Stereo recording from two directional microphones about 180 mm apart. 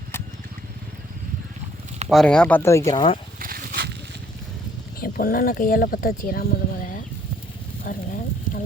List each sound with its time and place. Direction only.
2.0 s speech: centre (ahead or behind); by 3.2 s 25° left (ahead or behind)
3.4 s a sound: 55° right (ahead or behind)
4.9 s speech: 50° left (ahead or behind)